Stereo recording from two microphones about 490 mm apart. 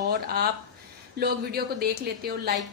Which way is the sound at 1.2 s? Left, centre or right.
Centre.